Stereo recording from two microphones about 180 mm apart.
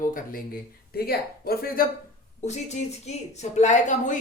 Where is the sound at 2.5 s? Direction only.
40° left (ahead or behind).